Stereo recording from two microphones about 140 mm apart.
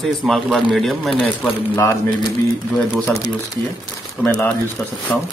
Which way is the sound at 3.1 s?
25° left (ahead or behind).